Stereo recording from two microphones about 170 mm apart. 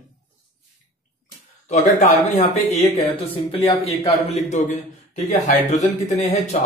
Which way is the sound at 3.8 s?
35° left (ahead or behind).